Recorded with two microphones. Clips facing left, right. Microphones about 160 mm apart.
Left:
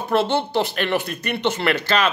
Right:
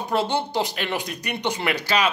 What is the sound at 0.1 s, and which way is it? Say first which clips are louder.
Speech: left 4 dB; 15° right (ahead or behind).